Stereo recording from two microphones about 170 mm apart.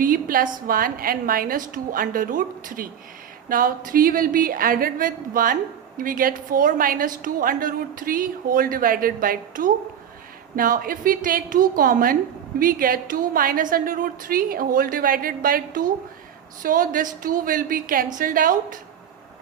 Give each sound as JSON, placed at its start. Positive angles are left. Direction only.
{"t": 0.0, "sound": "a woman's voice", "side_deg": -55}